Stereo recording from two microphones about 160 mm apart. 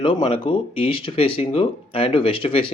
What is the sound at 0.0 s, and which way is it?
Speech, 30° left (ahead or behind).